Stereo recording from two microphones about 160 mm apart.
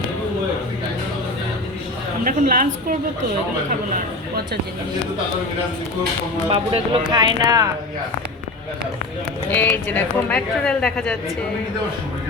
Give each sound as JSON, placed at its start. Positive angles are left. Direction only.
{"t": 2.2, "sound": "speech", "side_deg": -60}
{"t": 6.5, "sound": "speech", "side_deg": -30}
{"t": 9.5, "sound": "speech", "side_deg": 10}